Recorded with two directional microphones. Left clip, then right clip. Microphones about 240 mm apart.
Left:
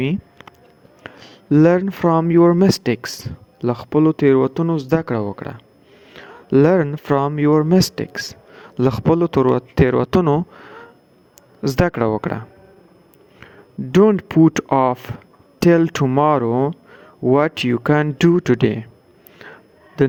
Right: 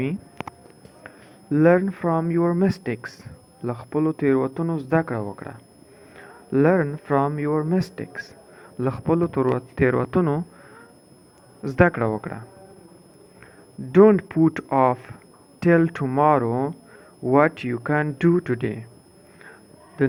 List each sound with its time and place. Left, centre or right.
1.0 s speech: left
13.9 s speech: left
20.0 s a man's voice: left